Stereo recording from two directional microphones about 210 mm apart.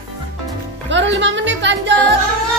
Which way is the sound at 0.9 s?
60° right (ahead or behind).